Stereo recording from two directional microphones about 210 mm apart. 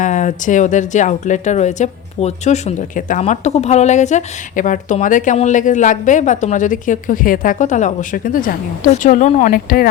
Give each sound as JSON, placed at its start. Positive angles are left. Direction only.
{"t": 0.0, "sound": "speech", "side_deg": 35}